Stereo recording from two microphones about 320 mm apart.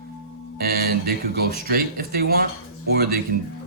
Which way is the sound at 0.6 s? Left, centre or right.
Right.